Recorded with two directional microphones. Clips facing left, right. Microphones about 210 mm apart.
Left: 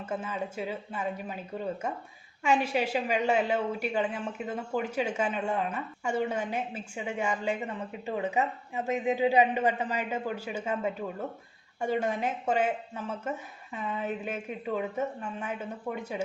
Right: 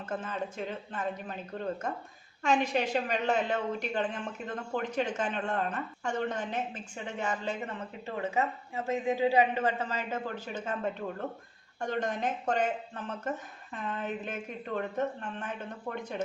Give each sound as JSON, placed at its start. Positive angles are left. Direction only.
{"t": 0.0, "sound": "a woman's voice", "side_deg": 10}